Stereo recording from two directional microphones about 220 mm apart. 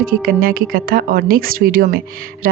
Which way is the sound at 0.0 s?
40° right (ahead or behind).